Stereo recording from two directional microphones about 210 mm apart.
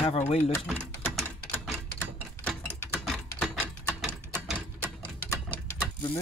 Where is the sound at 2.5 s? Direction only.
Centre (ahead or behind).